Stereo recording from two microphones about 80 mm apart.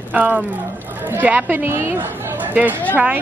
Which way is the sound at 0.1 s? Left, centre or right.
Right.